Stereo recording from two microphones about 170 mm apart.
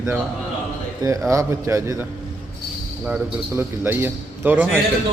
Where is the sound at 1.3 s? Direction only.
20° right (ahead or behind).